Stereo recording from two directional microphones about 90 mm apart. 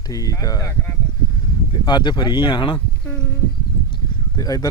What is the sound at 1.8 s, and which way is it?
Speech, 55° left (ahead or behind).